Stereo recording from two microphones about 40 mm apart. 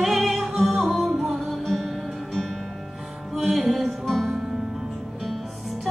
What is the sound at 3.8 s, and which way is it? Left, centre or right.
Music, centre.